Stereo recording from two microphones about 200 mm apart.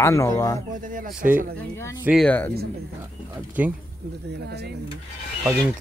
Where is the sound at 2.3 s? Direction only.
10° left (ahead or behind).